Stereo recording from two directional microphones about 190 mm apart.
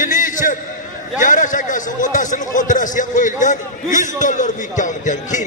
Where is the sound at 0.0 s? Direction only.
45° left (ahead or behind).